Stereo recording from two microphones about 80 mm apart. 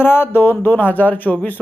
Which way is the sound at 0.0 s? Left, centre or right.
Left.